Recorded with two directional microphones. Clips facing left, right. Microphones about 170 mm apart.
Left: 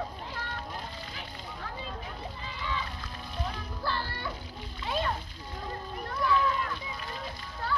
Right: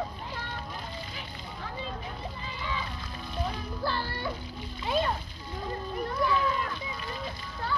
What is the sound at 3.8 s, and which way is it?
Music, 15° right (ahead or behind).